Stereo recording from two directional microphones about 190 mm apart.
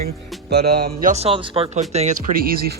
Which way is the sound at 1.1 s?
30° right (ahead or behind).